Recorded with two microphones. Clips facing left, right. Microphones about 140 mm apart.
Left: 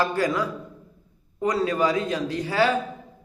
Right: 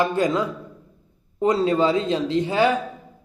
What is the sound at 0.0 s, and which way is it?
A man's voice, 20° right (ahead or behind).